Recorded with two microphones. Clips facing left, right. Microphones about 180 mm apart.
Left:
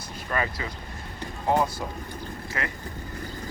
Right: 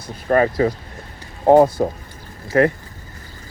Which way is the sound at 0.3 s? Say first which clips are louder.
Right 14 dB; 45° right (ahead or behind).